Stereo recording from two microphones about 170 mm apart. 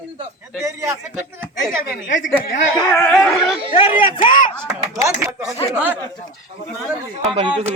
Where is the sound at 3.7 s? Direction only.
30° left (ahead or behind).